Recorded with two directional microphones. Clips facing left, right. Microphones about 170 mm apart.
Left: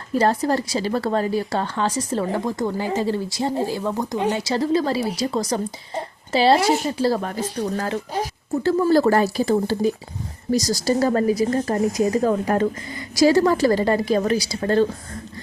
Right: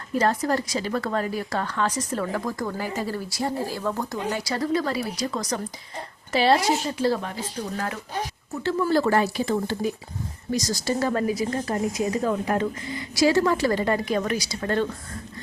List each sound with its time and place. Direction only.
0.1 s speech: 30° left (ahead or behind)
7.0 s speech: 40° left (ahead or behind)